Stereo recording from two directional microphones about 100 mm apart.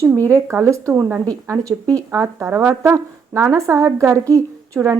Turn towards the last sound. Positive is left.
turn(degrees=-30)  # may be behind; listen again after turning